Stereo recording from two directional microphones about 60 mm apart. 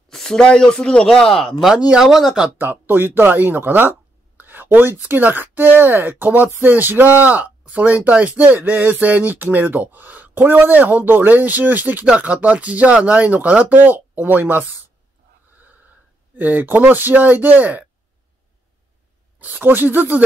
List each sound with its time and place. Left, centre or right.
0.1 s speech: centre
1.8 s speech: centre
2.0 s speech: centre
2.5 s speech: right
15.5 s snort: right
16.3 s speech: right
19.3 s speech: right